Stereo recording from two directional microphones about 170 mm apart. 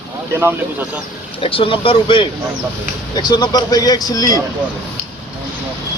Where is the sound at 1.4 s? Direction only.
30° left (ahead or behind).